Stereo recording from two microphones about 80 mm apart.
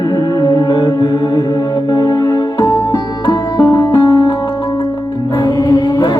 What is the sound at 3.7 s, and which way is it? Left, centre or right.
Music, left.